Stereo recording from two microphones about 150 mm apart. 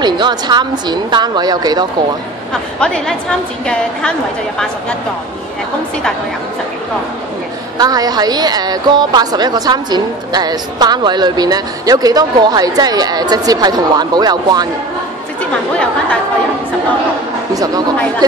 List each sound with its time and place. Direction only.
0.0 s a woman's voice: 30° right (ahead or behind)
2.8 s a woman's voice: 5° left (ahead or behind)
7.7 s a woman's voice: 25° right (ahead or behind)